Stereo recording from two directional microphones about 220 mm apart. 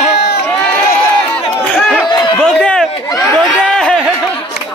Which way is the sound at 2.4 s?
5° left (ahead or behind).